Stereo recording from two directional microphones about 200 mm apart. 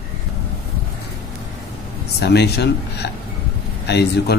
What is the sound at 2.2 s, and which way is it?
Speech, 55° left (ahead or behind).